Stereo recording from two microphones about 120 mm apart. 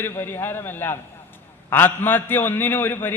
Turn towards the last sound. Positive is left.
turn(degrees=15)  # may be behind; listen again after turning